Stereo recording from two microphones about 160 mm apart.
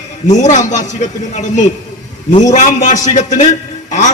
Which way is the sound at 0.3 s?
50° left (ahead or behind).